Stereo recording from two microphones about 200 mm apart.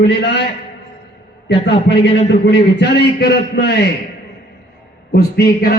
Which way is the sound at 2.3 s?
60° left (ahead or behind).